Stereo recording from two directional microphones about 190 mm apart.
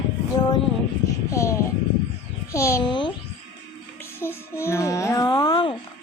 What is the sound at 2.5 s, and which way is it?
Speech, 15° left (ahead or behind).